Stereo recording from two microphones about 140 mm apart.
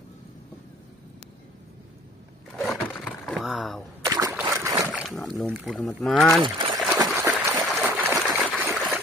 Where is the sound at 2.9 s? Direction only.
5° left (ahead or behind).